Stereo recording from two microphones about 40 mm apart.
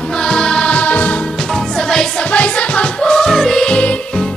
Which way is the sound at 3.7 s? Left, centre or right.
Left.